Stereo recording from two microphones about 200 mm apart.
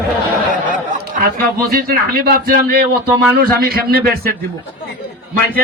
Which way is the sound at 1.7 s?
50° right (ahead or behind).